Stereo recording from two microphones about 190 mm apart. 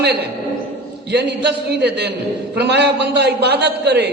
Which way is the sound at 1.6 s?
60° right (ahead or behind).